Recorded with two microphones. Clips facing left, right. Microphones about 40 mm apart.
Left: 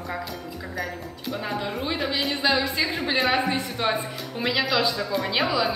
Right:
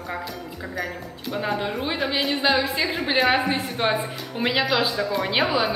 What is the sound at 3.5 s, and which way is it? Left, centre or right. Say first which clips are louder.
A woman's voice: right 2 dB; right.